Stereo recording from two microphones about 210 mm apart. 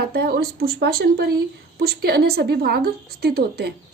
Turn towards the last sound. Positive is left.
turn(degrees=-50)  # may be behind; listen again after turning